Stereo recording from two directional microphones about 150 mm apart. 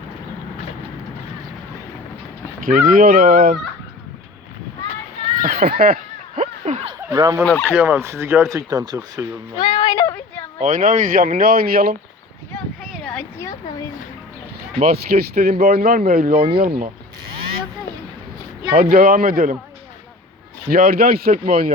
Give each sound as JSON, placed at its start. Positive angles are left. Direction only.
{"t": 2.6, "sound": "speech", "side_deg": -70}
{"t": 5.4, "sound": "speech", "side_deg": -70}
{"t": 6.4, "sound": "a sound", "side_deg": -50}
{"t": 7.1, "sound": "speech", "side_deg": -25}
{"t": 7.6, "sound": "speech", "side_deg": -15}
{"t": 9.6, "sound": "a sound", "side_deg": 35}
{"t": 10.6, "sound": "speech", "side_deg": -60}
{"t": 12.5, "sound": "a sound", "side_deg": 0}
{"t": 13.4, "sound": "a sound", "side_deg": 20}
{"t": 14.8, "sound": "a man's voice", "side_deg": -90}
{"t": 18.7, "sound": "a man's voice", "side_deg": -90}
{"t": 20.7, "sound": "a man's voice", "side_deg": -75}
{"t": 21.3, "sound": "speech", "side_deg": -65}